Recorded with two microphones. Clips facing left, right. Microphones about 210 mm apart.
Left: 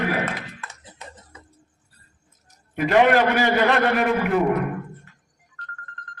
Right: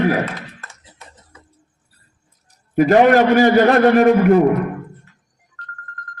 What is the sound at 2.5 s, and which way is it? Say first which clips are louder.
A man's voice: right 8 dB; 40° right (ahead or behind).